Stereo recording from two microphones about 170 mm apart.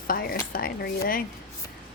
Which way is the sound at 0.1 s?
60° left (ahead or behind).